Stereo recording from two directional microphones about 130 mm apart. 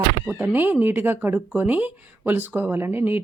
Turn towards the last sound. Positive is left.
turn(degrees=-15)  # may be behind; listen again after turning